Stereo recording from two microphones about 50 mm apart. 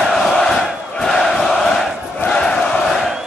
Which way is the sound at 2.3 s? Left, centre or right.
Centre.